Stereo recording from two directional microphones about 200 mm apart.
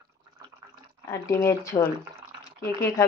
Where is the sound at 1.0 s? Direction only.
15° left (ahead or behind).